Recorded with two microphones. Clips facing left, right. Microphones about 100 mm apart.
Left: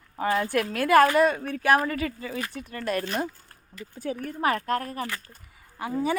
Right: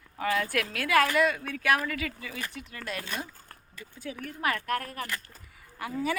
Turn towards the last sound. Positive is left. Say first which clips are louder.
# left 4 dB
turn(degrees=25)  # may be behind; listen again after turning